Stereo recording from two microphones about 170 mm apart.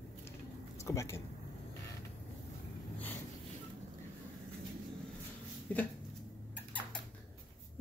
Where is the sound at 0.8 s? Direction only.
15° left (ahead or behind).